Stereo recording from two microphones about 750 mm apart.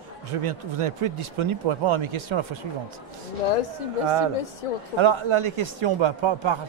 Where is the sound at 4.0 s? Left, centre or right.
Right.